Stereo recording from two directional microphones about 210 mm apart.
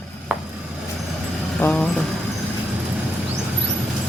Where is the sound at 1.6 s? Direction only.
5° left (ahead or behind).